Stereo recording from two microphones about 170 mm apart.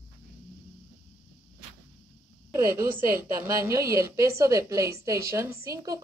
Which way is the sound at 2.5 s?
15° right (ahead or behind).